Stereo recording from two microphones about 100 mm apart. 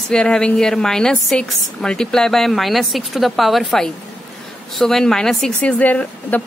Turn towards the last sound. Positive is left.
turn(degrees=15)  # may be behind; listen again after turning